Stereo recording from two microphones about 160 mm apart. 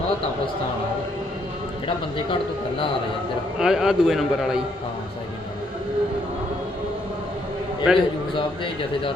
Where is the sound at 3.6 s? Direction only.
5° right (ahead or behind).